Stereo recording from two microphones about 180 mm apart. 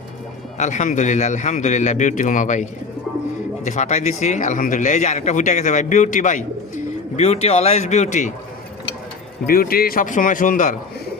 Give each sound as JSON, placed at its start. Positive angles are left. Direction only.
{"t": 0.6, "sound": "a man's voice", "side_deg": 40}
{"t": 9.5, "sound": "a man's voice", "side_deg": 55}